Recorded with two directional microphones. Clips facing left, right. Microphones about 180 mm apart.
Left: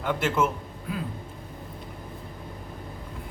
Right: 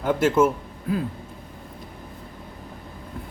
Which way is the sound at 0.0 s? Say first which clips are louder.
Right 6 dB; 40° right (ahead or behind).